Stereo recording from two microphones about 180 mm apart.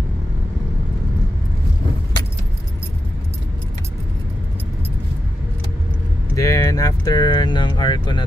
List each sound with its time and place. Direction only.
6.3 s speech: 20° left (ahead or behind)